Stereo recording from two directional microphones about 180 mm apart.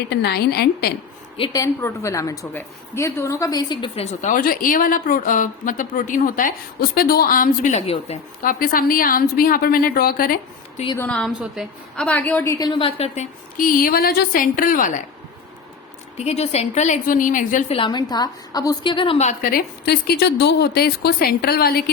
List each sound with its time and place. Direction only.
0.1 s a woman's voice: 65° left (ahead or behind)
1.4 s a woman's voice: 20° left (ahead or behind); by 8.2 s 35° left (ahead or behind)
8.4 s a woman's voice: 50° left (ahead or behind)
10.9 s a woman's voice: 10° left (ahead or behind)
12.5 s a woman's voice: 25° left (ahead or behind)
13.6 s a woman's voice: 50° left (ahead or behind)
16.1 s a woman's voice: 35° left (ahead or behind)
17.7 s a woman's voice: 25° left (ahead or behind); by 21.8 s 60° left (ahead or behind)